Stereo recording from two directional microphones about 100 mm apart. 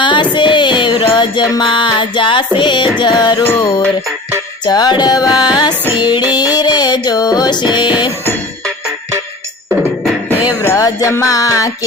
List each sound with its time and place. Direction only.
0.0 s music: 50° left (ahead or behind)
4.6 s music: 40° left (ahead or behind)
9.6 s music: 5° right (ahead or behind)
10.6 s music: 25° left (ahead or behind)